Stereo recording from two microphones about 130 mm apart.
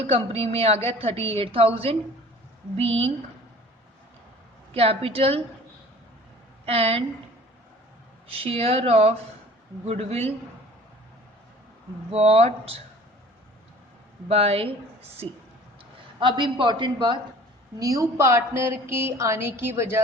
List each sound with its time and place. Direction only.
0.0 s a woman's voice: 50° right (ahead or behind)
4.7 s a woman's voice: 50° right (ahead or behind)
6.7 s a woman's voice: 50° right (ahead or behind)
8.3 s a woman's voice: 45° right (ahead or behind)
12.1 s a woman's voice: 50° right (ahead or behind)
14.3 s a woman's voice: 50° right (ahead or behind)
16.2 s a man's voice: 40° right (ahead or behind); by 20.0 s 20° right (ahead or behind)